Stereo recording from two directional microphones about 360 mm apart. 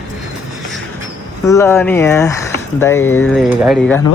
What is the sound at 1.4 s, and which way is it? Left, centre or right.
Speech, centre.